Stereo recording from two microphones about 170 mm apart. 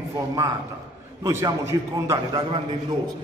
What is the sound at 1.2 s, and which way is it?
A man's voice, 15° right (ahead or behind).